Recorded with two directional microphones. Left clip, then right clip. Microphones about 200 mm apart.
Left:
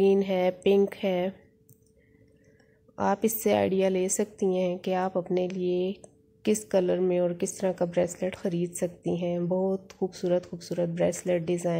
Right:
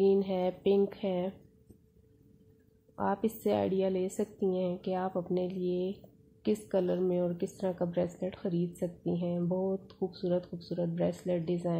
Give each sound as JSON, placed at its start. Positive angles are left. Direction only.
{"t": 0.0, "sound": "a woman's voice", "side_deg": 15}
{"t": 3.0, "sound": "a woman's voice", "side_deg": 20}